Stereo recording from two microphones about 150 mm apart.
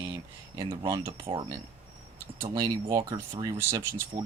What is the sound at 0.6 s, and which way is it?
Speech, 30° right (ahead or behind).